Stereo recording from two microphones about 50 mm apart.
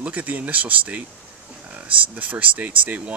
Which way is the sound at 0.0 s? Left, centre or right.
Right.